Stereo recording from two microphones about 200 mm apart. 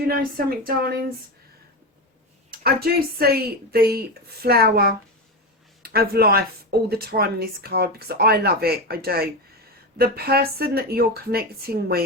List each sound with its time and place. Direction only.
0.1 s speech: 45° right (ahead or behind)
2.5 s speech: 50° right (ahead or behind)